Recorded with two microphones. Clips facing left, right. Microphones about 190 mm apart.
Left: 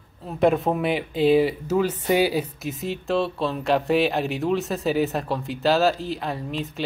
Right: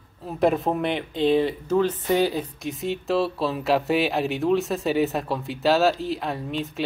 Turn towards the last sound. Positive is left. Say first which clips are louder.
# even
turn(degrees=0)  # may be behind; listen again after turning